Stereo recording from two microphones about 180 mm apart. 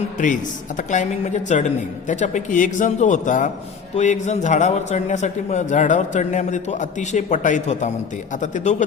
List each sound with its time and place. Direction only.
0.8 s a man's voice: 45° left (ahead or behind)